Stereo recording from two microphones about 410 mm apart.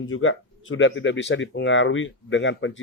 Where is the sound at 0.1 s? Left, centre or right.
Left.